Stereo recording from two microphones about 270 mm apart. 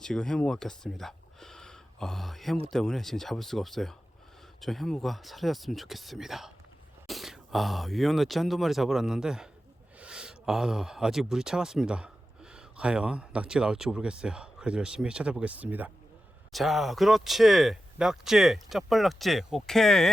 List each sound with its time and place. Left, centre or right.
0.0 s speech: centre